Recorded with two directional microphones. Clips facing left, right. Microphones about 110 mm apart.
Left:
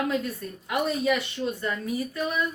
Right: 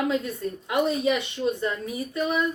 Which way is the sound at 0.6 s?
20° right (ahead or behind).